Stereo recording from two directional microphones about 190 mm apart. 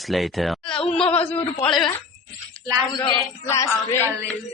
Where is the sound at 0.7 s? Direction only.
25° left (ahead or behind).